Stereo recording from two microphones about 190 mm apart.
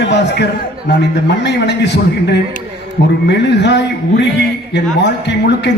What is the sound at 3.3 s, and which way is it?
Speech, 65° left (ahead or behind).